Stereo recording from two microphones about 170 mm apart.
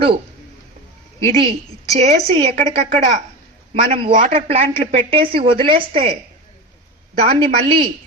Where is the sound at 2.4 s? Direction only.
35° right (ahead or behind).